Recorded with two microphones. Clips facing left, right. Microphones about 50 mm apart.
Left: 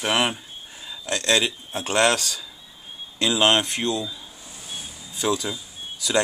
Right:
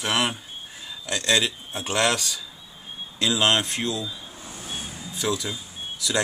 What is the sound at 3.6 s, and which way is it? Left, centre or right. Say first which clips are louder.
Speech: left 2 dB; left.